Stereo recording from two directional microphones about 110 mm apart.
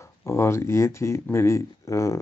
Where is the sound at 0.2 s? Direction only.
25° left (ahead or behind).